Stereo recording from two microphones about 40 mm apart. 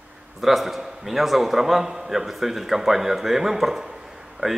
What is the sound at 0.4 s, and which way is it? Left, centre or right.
Speech, centre.